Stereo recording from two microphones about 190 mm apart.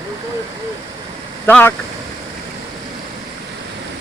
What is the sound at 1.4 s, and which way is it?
Speech, 10° left (ahead or behind).